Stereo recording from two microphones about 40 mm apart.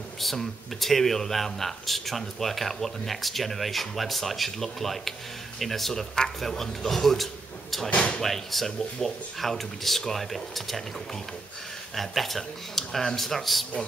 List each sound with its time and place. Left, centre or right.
0.2 s speech: centre
7.9 s speech: left
8.2 s speech: centre
11.9 s speech: centre